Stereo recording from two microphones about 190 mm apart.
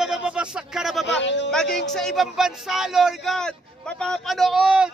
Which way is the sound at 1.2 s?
70° left (ahead or behind).